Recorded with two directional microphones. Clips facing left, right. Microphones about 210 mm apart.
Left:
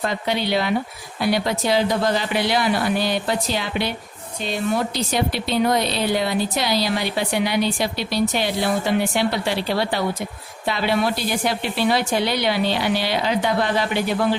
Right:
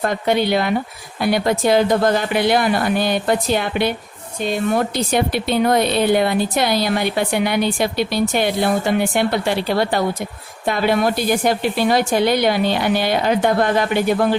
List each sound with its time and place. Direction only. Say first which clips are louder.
0.0 s speech: right 5 dB; 50° right (ahead or behind)